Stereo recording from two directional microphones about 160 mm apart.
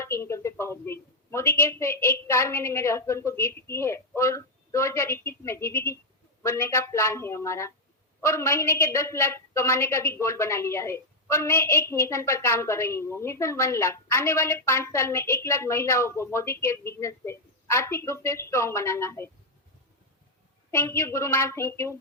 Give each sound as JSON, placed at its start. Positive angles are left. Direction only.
{"t": 0.0, "sound": "a woman's voice", "side_deg": 15}
{"t": 20.7, "sound": "a woman's voice", "side_deg": 15}